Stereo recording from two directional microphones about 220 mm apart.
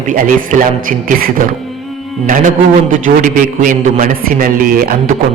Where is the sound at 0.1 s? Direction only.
40° right (ahead or behind).